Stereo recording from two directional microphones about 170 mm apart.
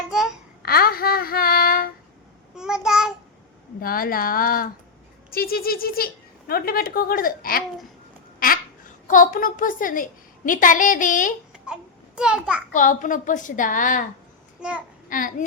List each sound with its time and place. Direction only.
0.1 s babbling: 5° right (ahead or behind)
0.6 s child singing: 60° left (ahead or behind)
2.6 s a sound: 5° right (ahead or behind)
3.8 s speech: 60° left (ahead or behind)
8.4 s duck: 55° left (ahead or behind)
9.0 s a woman's voice: 50° left (ahead or behind)
11.6 s a sound: 5° right (ahead or behind)
12.7 s a woman's voice: 50° left (ahead or behind)
14.6 s a child's voice: 5° right (ahead or behind)
15.1 s a woman's voice: 50° left (ahead or behind)